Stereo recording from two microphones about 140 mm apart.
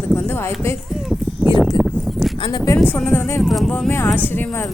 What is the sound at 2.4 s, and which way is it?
Speech, 30° left (ahead or behind).